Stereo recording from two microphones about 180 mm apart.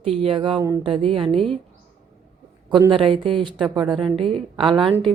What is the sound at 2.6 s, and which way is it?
Speech, 25° right (ahead or behind).